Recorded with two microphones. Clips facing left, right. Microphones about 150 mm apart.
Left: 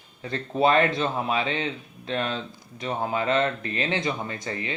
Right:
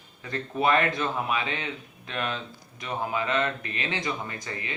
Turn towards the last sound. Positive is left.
turn(degrees=30)  # may be behind; listen again after turning